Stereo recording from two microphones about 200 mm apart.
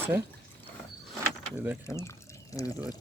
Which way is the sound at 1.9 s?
15° left (ahead or behind).